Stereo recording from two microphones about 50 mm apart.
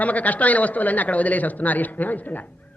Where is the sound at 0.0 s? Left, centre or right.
Left.